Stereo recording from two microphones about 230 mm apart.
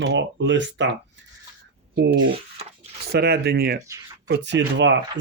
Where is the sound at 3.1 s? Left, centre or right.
Right.